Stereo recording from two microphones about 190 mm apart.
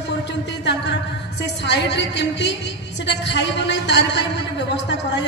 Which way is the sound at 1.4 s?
65° left (ahead or behind).